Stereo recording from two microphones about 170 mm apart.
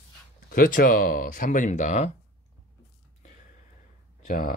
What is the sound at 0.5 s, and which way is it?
Speech, 55° left (ahead or behind).